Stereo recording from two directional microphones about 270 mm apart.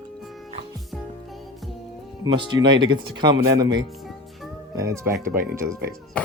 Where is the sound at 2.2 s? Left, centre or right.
Centre.